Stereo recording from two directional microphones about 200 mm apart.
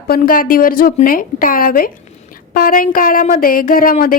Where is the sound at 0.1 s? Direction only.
45° left (ahead or behind).